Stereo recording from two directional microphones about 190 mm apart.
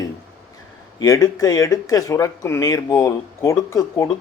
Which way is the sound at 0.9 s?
15° left (ahead or behind).